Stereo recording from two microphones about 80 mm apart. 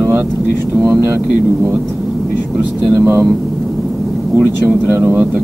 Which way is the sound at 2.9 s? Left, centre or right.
Right.